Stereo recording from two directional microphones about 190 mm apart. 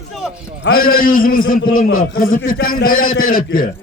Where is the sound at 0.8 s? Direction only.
50° left (ahead or behind).